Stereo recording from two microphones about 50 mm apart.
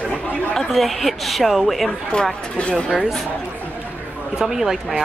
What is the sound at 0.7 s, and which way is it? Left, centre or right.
A woman's voice, centre.